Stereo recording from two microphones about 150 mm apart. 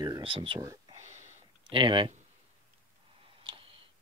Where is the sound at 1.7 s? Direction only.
35° right (ahead or behind).